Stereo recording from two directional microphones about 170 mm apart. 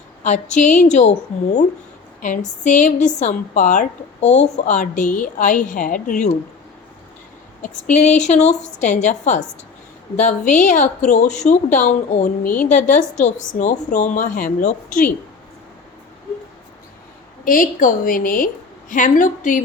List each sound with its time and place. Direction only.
0.2 s a woman's voice: 45° left (ahead or behind)
2.2 s a woman's voice: 45° left (ahead or behind)
8.0 s a woman's voice: 45° left (ahead or behind)
17.4 s a woman's voice: 55° left (ahead or behind)